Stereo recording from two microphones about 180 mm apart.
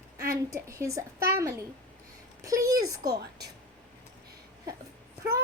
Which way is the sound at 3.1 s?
65° right (ahead or behind).